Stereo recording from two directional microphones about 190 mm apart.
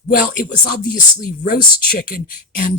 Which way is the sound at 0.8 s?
45° left (ahead or behind).